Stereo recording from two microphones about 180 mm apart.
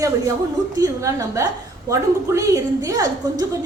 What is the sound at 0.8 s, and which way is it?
A woman's voice, 20° right (ahead or behind).